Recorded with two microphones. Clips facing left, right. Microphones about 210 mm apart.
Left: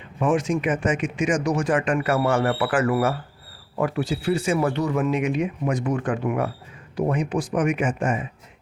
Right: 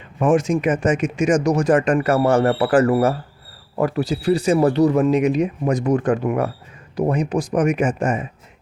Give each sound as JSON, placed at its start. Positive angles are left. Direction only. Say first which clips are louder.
{"t": 0.2, "sound": "speech", "louder": "right 4 dB", "side_deg": -45}